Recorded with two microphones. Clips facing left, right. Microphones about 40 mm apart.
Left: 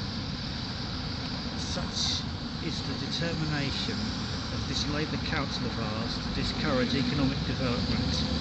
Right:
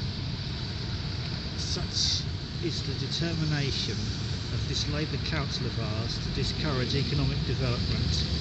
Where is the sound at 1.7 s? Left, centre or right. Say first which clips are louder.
Right 1 dB; left.